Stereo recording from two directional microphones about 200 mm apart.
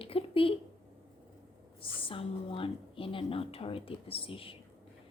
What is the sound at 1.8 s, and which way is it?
A woman's voice, 25° left (ahead or behind).